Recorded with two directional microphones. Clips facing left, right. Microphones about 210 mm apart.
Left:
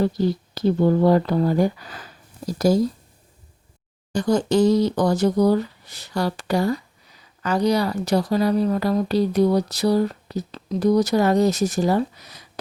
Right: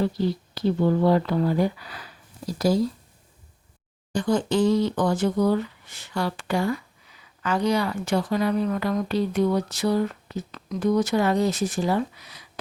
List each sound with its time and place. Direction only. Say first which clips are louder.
0.0 s speech: left 3 dB; 45° left (ahead or behind)
4.1 s speech: left 3 dB; 40° left (ahead or behind)